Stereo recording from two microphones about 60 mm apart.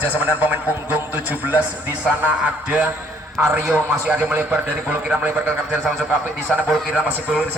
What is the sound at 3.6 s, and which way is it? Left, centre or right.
A man's voice, centre.